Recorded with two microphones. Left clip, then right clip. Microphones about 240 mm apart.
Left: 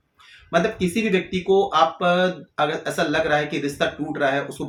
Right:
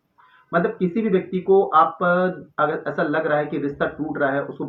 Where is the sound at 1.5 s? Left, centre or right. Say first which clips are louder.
Right 2 dB; left.